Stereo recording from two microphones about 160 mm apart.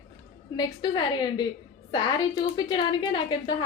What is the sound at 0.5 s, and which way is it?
A woman's voice, 25° left (ahead or behind).